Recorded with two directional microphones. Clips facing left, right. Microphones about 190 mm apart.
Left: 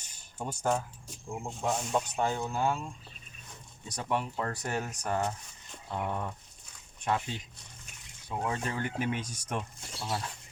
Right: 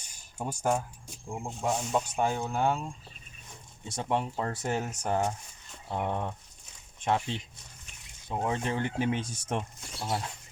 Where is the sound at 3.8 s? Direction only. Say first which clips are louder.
Right 2 dB; 25° right (ahead or behind).